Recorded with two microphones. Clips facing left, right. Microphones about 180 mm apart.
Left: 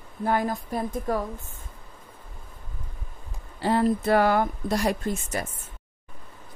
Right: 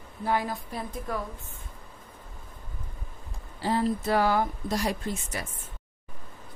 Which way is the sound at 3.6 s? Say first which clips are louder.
Left 4 dB; 60° left (ahead or behind).